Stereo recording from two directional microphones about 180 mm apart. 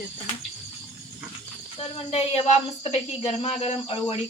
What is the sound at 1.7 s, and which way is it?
Speech, 30° left (ahead or behind).